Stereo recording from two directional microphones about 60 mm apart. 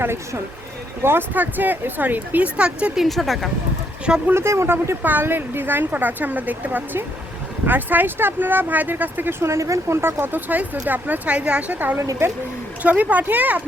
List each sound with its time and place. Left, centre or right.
0.0 s speech: right
1.3 s speech: right
2.6 s speech: centre
2.9 s speech: centre
4.3 s speech: right
5.0 s speech: right
9.4 s speech: right
10.0 s speech: right